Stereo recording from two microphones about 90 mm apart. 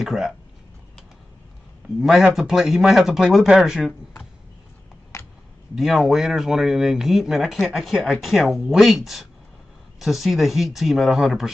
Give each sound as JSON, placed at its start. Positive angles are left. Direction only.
{"t": 0.0, "sound": "speech", "side_deg": 0}
{"t": 2.0, "sound": "speech", "side_deg": -5}
{"t": 5.1, "sound": "a sound", "side_deg": 35}
{"t": 5.8, "sound": "speech", "side_deg": 0}